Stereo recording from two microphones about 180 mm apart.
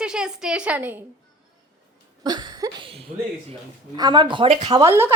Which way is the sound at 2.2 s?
25° right (ahead or behind).